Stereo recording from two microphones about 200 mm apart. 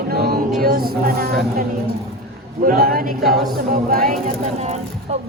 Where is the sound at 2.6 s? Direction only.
50° right (ahead or behind).